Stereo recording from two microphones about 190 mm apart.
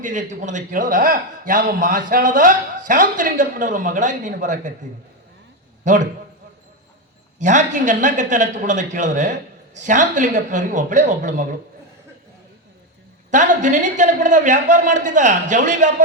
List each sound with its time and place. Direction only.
0.0 s a man's voice: 40° right (ahead or behind)
5.8 s a man's voice: 40° right (ahead or behind)
7.3 s a man's voice: 40° right (ahead or behind)
13.3 s a man's voice: 40° right (ahead or behind)